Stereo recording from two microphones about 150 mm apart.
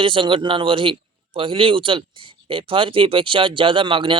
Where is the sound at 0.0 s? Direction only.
35° right (ahead or behind).